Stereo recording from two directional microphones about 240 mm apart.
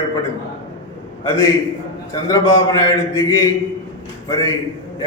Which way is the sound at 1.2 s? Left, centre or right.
Centre.